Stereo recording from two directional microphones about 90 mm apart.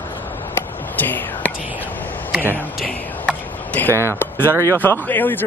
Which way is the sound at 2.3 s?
20° right (ahead or behind).